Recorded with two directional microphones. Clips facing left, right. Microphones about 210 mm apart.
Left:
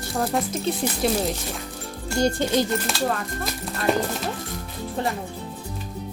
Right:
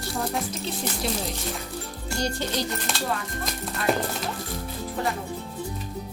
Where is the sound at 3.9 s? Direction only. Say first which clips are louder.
Left 2 dB; centre (ahead or behind).